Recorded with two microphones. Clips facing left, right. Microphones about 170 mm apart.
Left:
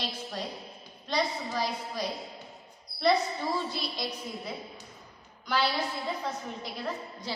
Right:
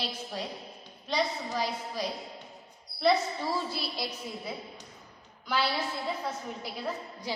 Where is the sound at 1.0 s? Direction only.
5° right (ahead or behind).